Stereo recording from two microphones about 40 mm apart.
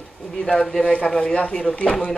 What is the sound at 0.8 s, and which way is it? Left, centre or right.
Speech, left.